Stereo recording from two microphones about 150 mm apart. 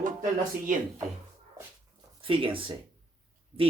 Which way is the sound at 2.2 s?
35° right (ahead or behind).